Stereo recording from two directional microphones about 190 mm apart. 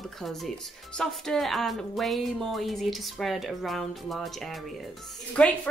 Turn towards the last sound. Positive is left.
turn(degrees=5)  # may be behind; listen again after turning